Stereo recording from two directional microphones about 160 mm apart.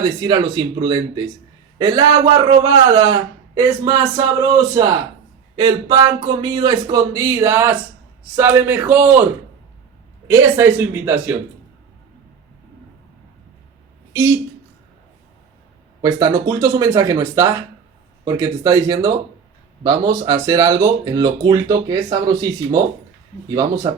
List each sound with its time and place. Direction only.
0.2 s speech: 25° right (ahead or behind)
10.2 s speech: 15° right (ahead or behind)
14.1 s a woman's voice: 15° right (ahead or behind)
16.0 s speech: 25° right (ahead or behind)